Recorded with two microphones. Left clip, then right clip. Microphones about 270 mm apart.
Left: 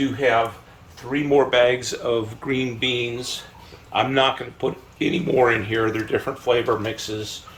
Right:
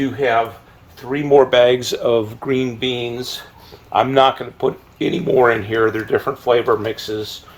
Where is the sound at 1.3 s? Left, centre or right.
Right.